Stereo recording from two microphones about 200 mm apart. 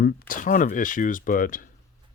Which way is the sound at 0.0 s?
45° left (ahead or behind).